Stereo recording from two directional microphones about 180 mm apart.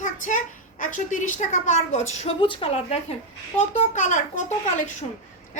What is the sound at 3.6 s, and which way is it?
Speech, 45° left (ahead or behind).